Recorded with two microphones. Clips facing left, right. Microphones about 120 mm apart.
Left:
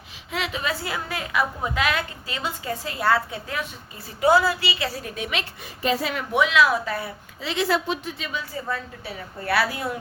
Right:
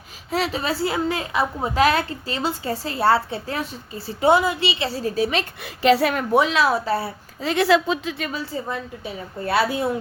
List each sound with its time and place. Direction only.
0.3 s a woman's voice: 35° right (ahead or behind)
5.6 s a woman's voice: 80° right
6.3 s a woman's voice: 35° right (ahead or behind)
7.4 s speech: 55° right (ahead or behind)
8.3 s a woman's voice: 35° right (ahead or behind)
8.7 s a woman's voice: 20° right (ahead or behind)